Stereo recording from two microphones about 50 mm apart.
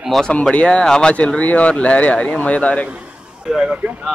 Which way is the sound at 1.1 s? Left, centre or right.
Left.